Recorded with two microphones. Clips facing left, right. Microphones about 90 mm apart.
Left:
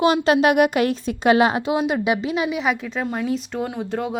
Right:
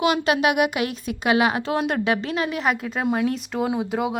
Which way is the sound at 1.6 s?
5° left (ahead or behind).